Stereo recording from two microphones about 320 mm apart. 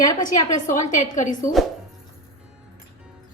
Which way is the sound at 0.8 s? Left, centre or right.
Left.